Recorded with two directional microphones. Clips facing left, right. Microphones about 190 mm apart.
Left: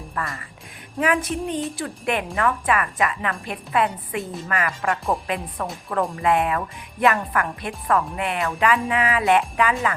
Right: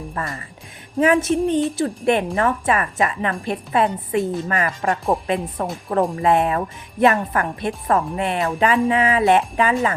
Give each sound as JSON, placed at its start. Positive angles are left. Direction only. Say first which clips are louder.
{"t": 0.1, "sound": "speech", "louder": "right 2 dB", "side_deg": -25}